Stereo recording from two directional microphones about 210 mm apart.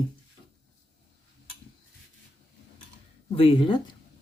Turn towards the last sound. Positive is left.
turn(degrees=25)  # may be behind; listen again after turning